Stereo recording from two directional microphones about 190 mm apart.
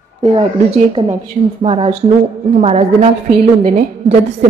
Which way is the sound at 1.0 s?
25° right (ahead or behind).